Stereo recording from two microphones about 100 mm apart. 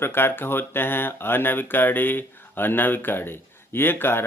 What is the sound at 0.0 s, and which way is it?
Speech, 20° left (ahead or behind).